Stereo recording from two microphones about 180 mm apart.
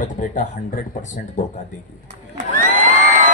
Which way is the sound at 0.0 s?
45° left (ahead or behind).